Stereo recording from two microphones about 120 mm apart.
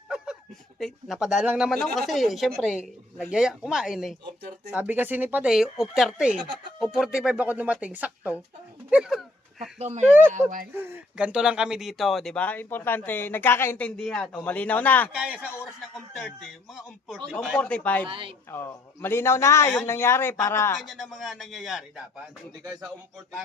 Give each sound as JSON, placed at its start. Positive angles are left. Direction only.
{"t": 0.8, "sound": "speech", "side_deg": 0}
{"t": 4.7, "sound": "speech", "side_deg": -15}
{"t": 6.4, "sound": "speech", "side_deg": -40}
{"t": 6.7, "sound": "speech", "side_deg": -5}
{"t": 8.9, "sound": "a sound", "side_deg": -5}
{"t": 9.7, "sound": "speech", "side_deg": -70}
{"t": 10.4, "sound": "speech", "side_deg": -15}
{"t": 15.1, "sound": "speech", "side_deg": -10}
{"t": 16.1, "sound": "speech", "side_deg": 5}
{"t": 17.6, "sound": "speech", "side_deg": 10}
{"t": 18.0, "sound": "speech", "side_deg": -45}
{"t": 18.5, "sound": "a man's voice", "side_deg": 20}
{"t": 20.7, "sound": "speech", "side_deg": 0}